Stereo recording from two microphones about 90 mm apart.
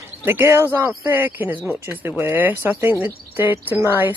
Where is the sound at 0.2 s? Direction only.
25° right (ahead or behind).